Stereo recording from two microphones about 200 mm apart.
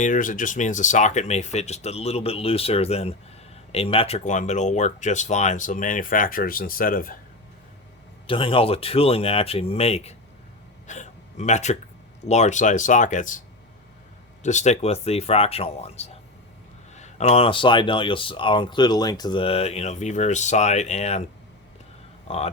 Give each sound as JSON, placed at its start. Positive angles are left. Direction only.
{"t": 0.0, "sound": "speech", "side_deg": 40}
{"t": 8.3, "sound": "speech", "side_deg": 25}
{"t": 10.8, "sound": "a sound", "side_deg": 35}
{"t": 12.2, "sound": "speech", "side_deg": 35}
{"t": 14.4, "sound": "speech", "side_deg": 35}
{"t": 22.3, "sound": "speech", "side_deg": 35}